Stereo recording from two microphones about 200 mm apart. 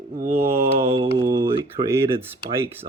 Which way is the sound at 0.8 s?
30° right (ahead or behind).